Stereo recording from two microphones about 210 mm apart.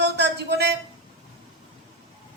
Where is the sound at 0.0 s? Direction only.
55° right (ahead or behind).